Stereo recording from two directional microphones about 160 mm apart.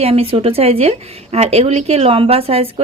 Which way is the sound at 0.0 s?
40° right (ahead or behind).